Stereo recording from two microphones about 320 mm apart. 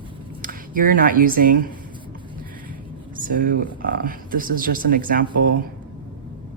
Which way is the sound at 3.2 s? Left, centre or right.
Right.